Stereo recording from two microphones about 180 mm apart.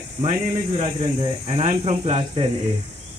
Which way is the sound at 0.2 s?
35° right (ahead or behind).